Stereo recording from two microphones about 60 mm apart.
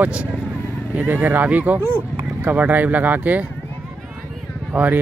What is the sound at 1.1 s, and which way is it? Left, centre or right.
Speech, right.